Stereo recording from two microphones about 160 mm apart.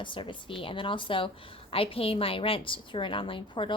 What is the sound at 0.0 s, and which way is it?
A woman's voice, 30° left (ahead or behind).